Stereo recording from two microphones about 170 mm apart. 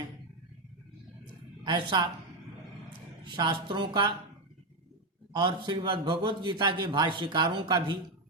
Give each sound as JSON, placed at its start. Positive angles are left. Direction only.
{"t": 1.6, "sound": "a man's voice", "side_deg": -25}
{"t": 3.2, "sound": "a man's voice", "side_deg": -25}
{"t": 5.3, "sound": "a man's voice", "side_deg": -25}